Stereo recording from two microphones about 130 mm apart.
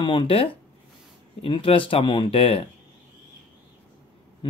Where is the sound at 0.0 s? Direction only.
40° left (ahead or behind).